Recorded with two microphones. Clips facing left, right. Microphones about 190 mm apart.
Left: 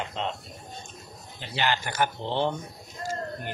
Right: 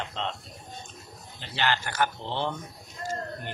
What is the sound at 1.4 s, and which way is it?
Speech, 15° left (ahead or behind).